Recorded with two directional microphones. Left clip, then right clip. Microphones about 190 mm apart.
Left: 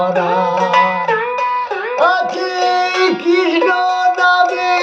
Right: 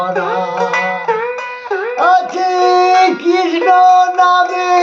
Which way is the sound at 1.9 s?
15° right (ahead or behind).